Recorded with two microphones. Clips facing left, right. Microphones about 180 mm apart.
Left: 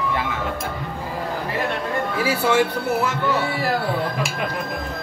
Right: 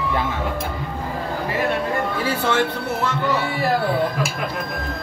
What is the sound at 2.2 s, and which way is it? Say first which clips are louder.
Speech: left 4 dB; 10° left (ahead or behind).